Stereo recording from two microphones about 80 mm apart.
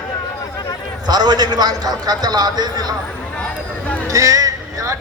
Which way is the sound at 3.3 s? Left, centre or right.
Centre.